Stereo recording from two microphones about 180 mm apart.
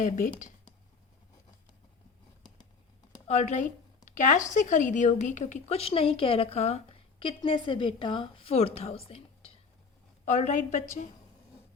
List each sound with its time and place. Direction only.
0.0 s a woman's voice: 45° left (ahead or behind)
3.2 s a woman's voice: 40° left (ahead or behind)